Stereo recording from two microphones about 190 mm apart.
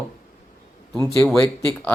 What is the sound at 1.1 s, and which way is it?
Speech, centre (ahead or behind).